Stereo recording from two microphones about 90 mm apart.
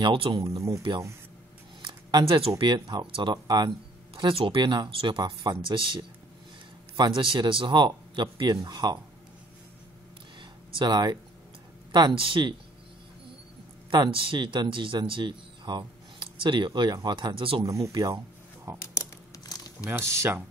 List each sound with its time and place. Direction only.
0.0 s speech: 65° right (ahead or behind)
0.6 s speech: 35° right (ahead or behind)
2.2 s speech: 75° right (ahead or behind)
2.7 s speech: 55° right (ahead or behind)
4.1 s speech: 90° right; by 9.0 s 50° right (ahead or behind)
10.8 s speech: 50° right (ahead or behind)
12.2 s speech: 65° right (ahead or behind)
13.8 s a man's voice: 50° right (ahead or behind)
14.1 s speech: 75° right (ahead or behind)
17.6 s speech: 35° right (ahead or behind)
19.9 s speech: 25° right (ahead or behind)